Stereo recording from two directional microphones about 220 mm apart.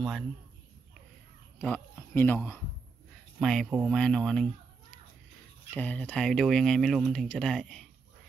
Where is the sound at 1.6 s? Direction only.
5° left (ahead or behind).